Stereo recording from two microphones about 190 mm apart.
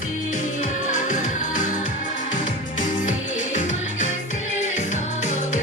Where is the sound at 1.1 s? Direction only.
40° left (ahead or behind).